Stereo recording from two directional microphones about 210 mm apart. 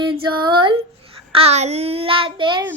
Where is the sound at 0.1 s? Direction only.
20° right (ahead or behind).